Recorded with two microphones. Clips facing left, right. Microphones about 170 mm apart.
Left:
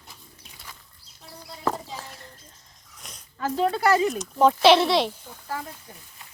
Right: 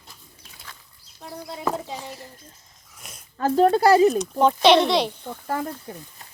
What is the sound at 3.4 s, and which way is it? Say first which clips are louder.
Speech: right 6 dB; 45° right (ahead or behind).